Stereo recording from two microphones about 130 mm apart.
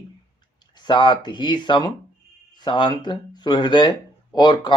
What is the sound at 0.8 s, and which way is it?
Speech, 35° left (ahead or behind).